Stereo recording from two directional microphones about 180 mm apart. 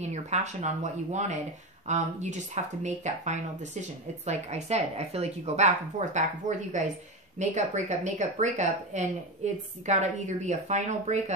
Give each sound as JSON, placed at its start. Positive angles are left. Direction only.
{"t": 0.0, "sound": "speech", "side_deg": -40}